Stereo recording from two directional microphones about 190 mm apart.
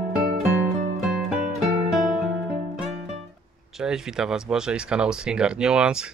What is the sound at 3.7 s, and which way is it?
Speech, 5° right (ahead or behind).